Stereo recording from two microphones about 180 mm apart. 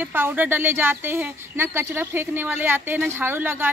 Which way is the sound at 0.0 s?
10° right (ahead or behind).